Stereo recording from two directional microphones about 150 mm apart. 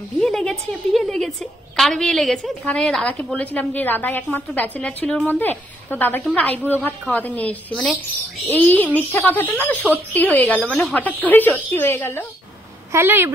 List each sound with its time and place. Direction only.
0.2 s a woman's voice: 5° left (ahead or behind)
12.9 s speech: 15° right (ahead or behind)